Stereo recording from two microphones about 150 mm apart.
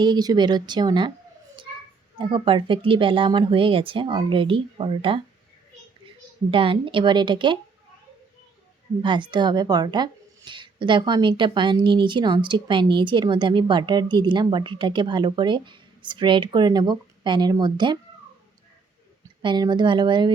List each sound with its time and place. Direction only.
0.0 s speech: 30° right (ahead or behind)
2.1 s a woman's voice: 35° right (ahead or behind)
6.5 s a woman's voice: 35° right (ahead or behind)
9.0 s a woman's voice: 30° right (ahead or behind)
19.4 s a woman's voice: 30° right (ahead or behind)